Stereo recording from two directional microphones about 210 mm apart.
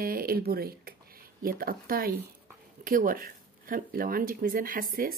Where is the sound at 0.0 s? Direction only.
45° right (ahead or behind).